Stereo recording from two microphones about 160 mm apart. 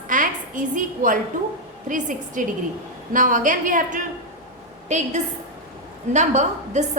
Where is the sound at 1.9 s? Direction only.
55° right (ahead or behind).